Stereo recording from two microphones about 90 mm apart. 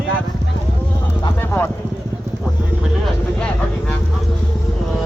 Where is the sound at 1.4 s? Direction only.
25° left (ahead or behind).